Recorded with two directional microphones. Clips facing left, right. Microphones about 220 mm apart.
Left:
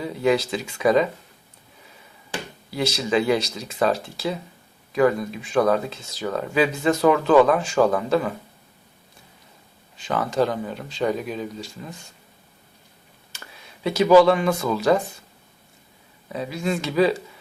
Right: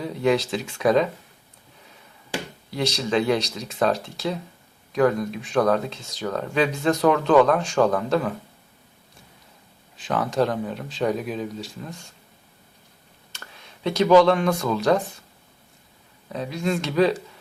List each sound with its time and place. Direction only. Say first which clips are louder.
0.0 s speech: left 1 dB; centre (ahead or behind)
2.6 s speech: left 1 dB; centre (ahead or behind)
10.0 s speech: even; centre (ahead or behind)
13.3 s speech: left 1 dB; 5° left (ahead or behind)
16.3 s speech: even; 5° left (ahead or behind)